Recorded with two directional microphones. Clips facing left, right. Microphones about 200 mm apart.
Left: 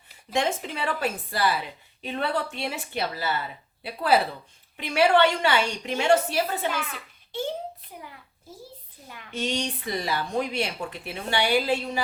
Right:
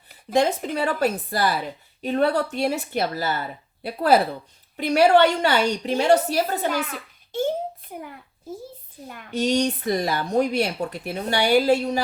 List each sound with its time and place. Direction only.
0.3 s a woman's voice: 40° right (ahead or behind)
9.0 s speech: 50° right (ahead or behind)